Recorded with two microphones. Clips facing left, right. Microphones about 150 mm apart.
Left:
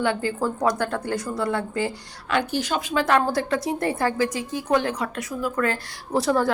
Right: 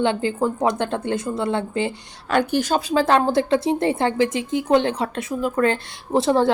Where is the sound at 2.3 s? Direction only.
45° right (ahead or behind).